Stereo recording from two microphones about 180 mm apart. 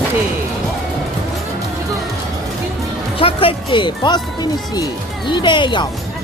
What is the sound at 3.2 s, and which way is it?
Speech, 30° left (ahead or behind).